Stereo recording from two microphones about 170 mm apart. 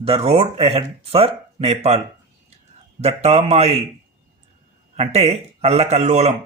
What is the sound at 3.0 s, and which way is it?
Speech, 40° right (ahead or behind).